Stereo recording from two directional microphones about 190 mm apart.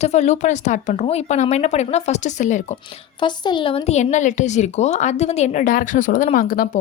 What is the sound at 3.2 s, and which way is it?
A woman's voice, 25° left (ahead or behind).